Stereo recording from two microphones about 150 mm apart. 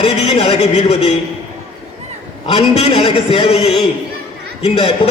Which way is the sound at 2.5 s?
35° left (ahead or behind).